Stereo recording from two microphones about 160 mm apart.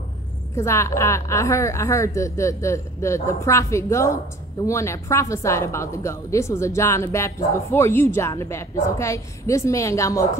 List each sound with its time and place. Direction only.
0.6 s a woman's voice: 20° left (ahead or behind)